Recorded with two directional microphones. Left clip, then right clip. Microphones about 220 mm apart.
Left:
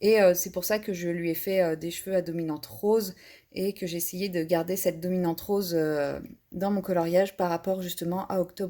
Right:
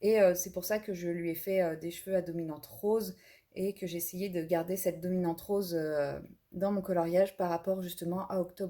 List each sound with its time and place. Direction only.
0.0 s speech: 35° left (ahead or behind)